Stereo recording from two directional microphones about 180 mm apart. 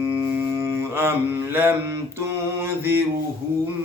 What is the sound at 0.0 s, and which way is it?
Mantra, 15° right (ahead or behind).